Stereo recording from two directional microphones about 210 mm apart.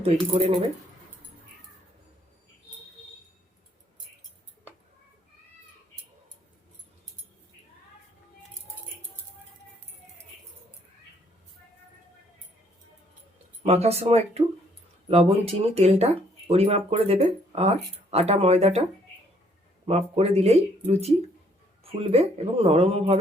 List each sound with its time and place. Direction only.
0.0 s speech: 30° right (ahead or behind)
13.6 s speech: 30° right (ahead or behind)
19.9 s speech: 30° right (ahead or behind)
22.1 s speech: 30° right (ahead or behind)